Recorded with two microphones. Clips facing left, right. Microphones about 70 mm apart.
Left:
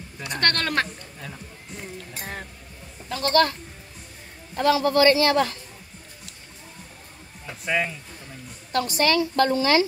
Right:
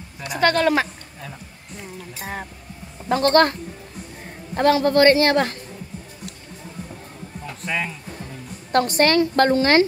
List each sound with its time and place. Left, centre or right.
0.3 s a woman's voice: centre
3.1 s speech: right
4.6 s a woman's voice: right
7.4 s a woman's voice: centre
8.7 s a woman's voice: right